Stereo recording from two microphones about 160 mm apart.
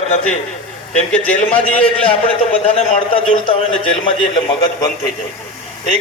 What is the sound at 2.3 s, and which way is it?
A man's voice, 40° left (ahead or behind).